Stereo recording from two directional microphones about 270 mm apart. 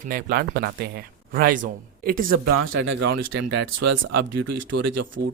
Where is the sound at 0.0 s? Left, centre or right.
Right.